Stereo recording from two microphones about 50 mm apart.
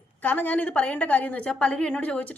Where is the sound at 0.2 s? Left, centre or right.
Left.